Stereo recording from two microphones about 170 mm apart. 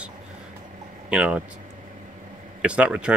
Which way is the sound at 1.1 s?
5° right (ahead or behind).